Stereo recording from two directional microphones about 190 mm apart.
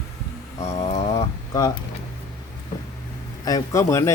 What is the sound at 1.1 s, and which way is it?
Speech, 20° left (ahead or behind).